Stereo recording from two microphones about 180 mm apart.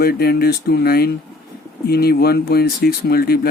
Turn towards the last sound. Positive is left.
turn(degrees=60)  # may be behind; listen again after turning